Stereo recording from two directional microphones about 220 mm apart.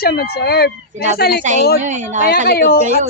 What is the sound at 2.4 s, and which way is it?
Speech, 45° left (ahead or behind).